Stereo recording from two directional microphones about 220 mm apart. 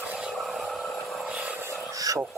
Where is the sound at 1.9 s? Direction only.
15° right (ahead or behind).